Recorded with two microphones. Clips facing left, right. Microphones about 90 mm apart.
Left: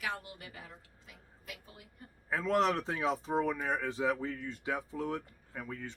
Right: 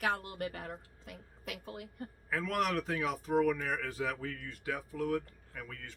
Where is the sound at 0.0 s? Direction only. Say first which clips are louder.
Right 6 dB; 50° right (ahead or behind); by 2.0 s 70° right (ahead or behind).